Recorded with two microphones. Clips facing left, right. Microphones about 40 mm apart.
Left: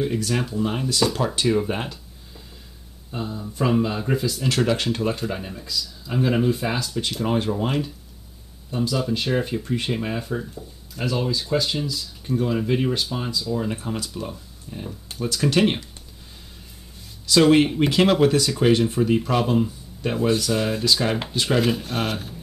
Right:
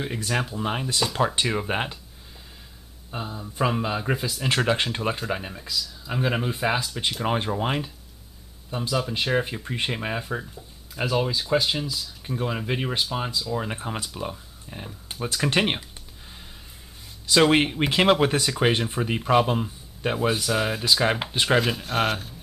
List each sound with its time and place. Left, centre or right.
0.0 s speech: centre
3.1 s speech: centre
5.6 s speech: centre
17.3 s speech: right
21.5 s speech: centre